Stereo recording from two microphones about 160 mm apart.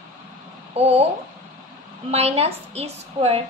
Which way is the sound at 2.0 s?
40° right (ahead or behind).